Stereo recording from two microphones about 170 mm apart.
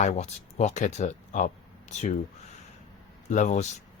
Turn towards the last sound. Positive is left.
turn(degrees=45)  # may be behind; listen again after turning